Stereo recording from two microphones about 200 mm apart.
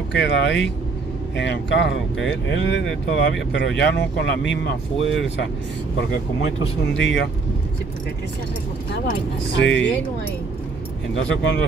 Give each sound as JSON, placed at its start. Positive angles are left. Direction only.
{"t": 0.1, "sound": "speech", "side_deg": 60}
{"t": 7.0, "sound": "speech", "side_deg": 70}
{"t": 9.6, "sound": "speech", "side_deg": 65}